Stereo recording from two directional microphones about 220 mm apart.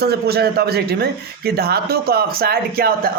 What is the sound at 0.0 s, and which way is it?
Speech, 45° right (ahead or behind).